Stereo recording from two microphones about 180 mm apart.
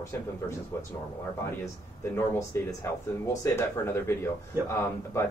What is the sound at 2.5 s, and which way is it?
Speech, 15° left (ahead or behind).